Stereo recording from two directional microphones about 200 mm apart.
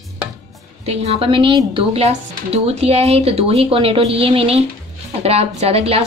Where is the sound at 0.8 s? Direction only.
30° right (ahead or behind).